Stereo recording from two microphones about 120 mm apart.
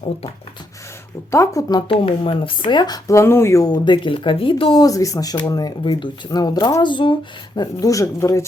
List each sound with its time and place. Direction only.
1.3 s speech: 25° left (ahead or behind)
1.9 s speech: 50° left (ahead or behind)
4.8 s speech: 30° left (ahead or behind)